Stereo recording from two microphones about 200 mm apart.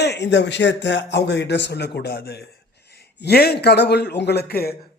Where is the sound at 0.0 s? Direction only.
60° left (ahead or behind).